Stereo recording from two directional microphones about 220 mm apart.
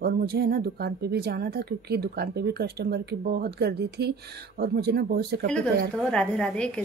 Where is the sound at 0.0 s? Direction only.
45° right (ahead or behind).